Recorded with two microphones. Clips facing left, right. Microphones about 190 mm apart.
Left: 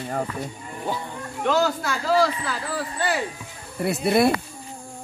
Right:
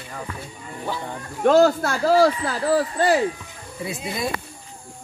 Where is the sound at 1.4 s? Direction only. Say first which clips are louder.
Right 7 dB; 55° right (ahead or behind).